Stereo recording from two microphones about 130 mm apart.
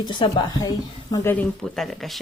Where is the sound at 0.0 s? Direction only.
35° left (ahead or behind).